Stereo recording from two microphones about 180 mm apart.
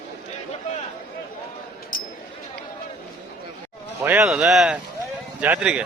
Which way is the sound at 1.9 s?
50° left (ahead or behind).